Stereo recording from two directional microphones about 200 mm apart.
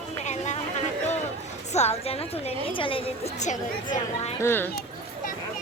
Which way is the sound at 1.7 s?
35° left (ahead or behind).